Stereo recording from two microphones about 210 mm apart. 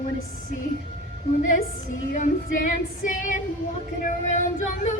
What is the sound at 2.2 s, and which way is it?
Female singing, 35° left (ahead or behind).